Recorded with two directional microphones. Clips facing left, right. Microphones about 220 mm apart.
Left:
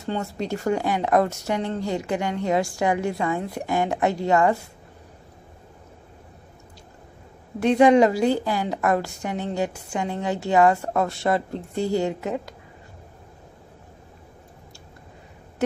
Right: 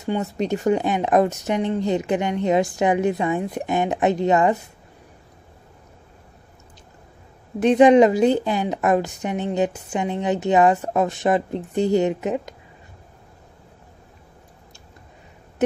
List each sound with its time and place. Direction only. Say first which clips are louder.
0.0 s a woman's voice: right 4 dB; 20° right (ahead or behind)
7.6 s a woman's voice: right 3 dB; 20° right (ahead or behind)